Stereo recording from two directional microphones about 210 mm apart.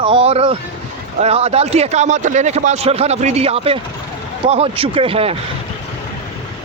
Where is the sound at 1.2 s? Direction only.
30° right (ahead or behind).